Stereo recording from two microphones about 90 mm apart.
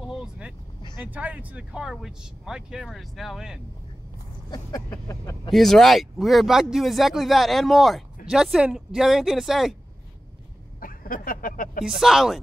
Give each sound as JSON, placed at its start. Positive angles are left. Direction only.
{"t": 0.1, "sound": "vehicle", "side_deg": -10}
{"t": 1.0, "sound": "speech", "side_deg": -20}
{"t": 5.0, "sound": "speech", "side_deg": 35}
{"t": 5.5, "sound": "speech", "side_deg": 0}
{"t": 11.8, "sound": "speech", "side_deg": -5}